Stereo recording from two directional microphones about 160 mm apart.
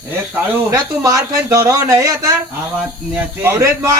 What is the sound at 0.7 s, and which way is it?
Speech, 20° right (ahead or behind).